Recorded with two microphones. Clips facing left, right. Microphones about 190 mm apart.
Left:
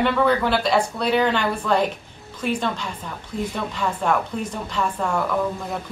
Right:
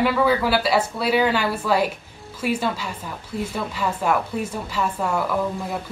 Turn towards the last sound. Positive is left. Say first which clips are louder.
# even
turn(degrees=-5)  # may be behind; listen again after turning